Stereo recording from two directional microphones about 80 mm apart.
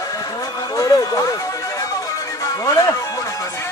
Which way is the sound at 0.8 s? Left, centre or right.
Left.